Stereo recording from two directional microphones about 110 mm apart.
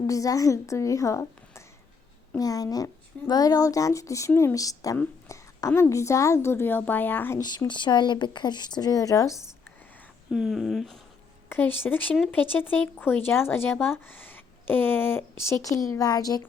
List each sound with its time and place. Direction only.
0.1 s speech: 30° left (ahead or behind)
5.3 s a sound: 30° left (ahead or behind)
5.9 s speech: 25° left (ahead or behind)
7.3 s speech: 35° left (ahead or behind)
10.3 s speech: 5° right (ahead or behind)
11.4 s speech: 20° left (ahead or behind); by 16.4 s 35° left (ahead or behind)